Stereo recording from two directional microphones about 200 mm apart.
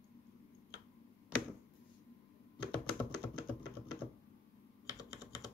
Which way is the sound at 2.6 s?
20° left (ahead or behind).